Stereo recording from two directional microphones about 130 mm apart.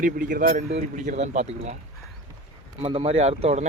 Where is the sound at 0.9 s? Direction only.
75° right (ahead or behind).